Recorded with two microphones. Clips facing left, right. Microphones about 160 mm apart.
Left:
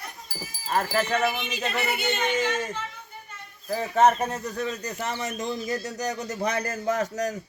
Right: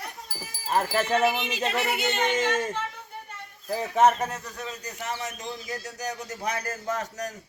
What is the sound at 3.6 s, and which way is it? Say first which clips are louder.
Speech: left 1 dB; 10° right (ahead or behind).